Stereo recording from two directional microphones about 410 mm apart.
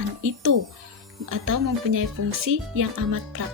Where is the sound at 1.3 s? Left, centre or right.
Right.